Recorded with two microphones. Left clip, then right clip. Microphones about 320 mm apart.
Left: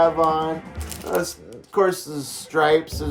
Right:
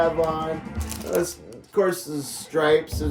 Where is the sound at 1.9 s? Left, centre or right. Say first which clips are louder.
Left 1 dB; centre.